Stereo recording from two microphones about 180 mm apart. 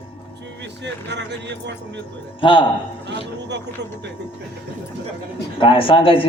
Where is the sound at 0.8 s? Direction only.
75° right (ahead or behind).